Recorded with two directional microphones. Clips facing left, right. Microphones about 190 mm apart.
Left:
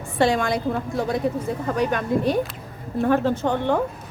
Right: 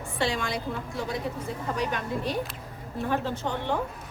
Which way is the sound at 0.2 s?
50° left (ahead or behind).